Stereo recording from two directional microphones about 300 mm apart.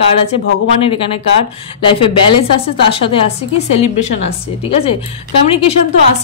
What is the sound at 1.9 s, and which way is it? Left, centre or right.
A woman's voice, centre.